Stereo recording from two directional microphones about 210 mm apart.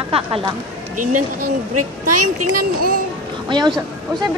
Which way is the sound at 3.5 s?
20° right (ahead or behind).